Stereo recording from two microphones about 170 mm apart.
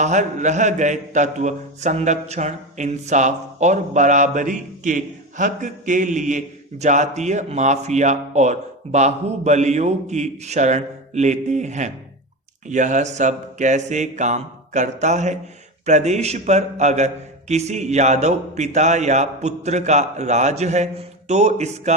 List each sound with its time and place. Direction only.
0.0 s a man's voice: 45° right (ahead or behind)